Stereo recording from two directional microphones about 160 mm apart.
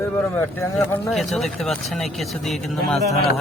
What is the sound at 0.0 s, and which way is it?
Speech, 15° left (ahead or behind).